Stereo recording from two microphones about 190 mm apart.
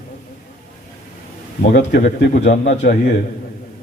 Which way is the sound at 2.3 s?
40° left (ahead or behind).